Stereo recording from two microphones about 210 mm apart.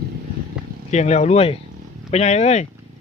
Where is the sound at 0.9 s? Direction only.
35° left (ahead or behind).